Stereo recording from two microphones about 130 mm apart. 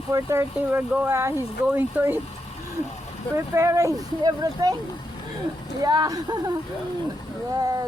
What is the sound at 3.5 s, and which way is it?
Speech, 25° right (ahead or behind).